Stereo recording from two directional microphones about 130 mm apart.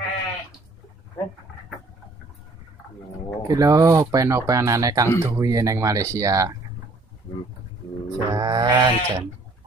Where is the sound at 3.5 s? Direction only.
25° right (ahead or behind).